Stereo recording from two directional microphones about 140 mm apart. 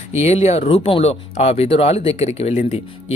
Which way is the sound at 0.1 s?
50° left (ahead or behind).